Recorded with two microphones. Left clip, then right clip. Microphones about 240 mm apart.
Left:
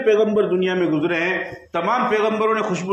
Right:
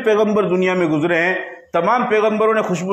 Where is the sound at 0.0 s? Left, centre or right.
Right.